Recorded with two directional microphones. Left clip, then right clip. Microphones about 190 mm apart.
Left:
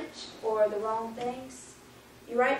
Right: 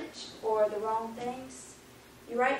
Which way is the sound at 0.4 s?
20° left (ahead or behind).